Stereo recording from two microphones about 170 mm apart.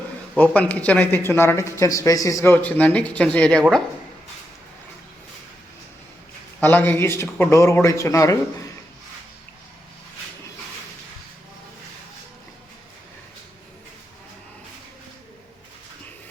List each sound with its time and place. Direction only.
0.3 s speech: 10° left (ahead or behind)
6.6 s speech: 10° left (ahead or behind)